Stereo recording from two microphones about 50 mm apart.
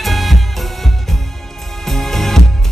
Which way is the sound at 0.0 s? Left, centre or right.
Centre.